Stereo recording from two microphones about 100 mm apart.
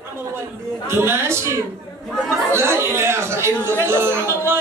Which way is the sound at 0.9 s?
25° right (ahead or behind).